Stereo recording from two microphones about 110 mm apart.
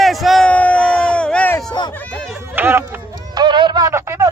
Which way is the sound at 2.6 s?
20° right (ahead or behind).